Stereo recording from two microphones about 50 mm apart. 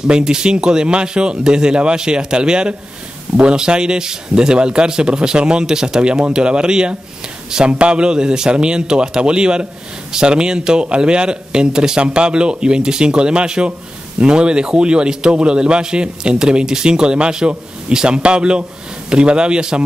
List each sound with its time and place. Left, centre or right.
0.0 s a man's voice: centre